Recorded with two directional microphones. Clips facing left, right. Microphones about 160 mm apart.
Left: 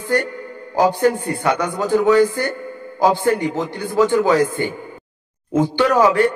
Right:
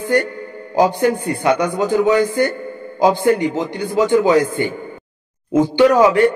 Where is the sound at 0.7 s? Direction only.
15° right (ahead or behind).